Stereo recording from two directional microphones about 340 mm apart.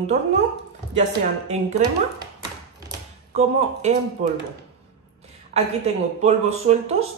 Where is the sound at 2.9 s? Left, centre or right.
Centre.